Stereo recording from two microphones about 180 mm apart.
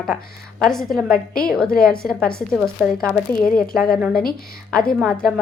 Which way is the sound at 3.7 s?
Centre (ahead or behind).